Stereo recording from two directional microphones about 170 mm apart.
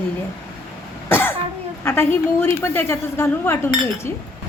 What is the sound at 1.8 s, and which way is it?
A woman's voice, 15° left (ahead or behind).